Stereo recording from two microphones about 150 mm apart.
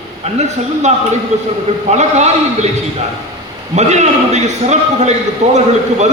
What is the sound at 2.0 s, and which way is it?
Speech, 50° right (ahead or behind).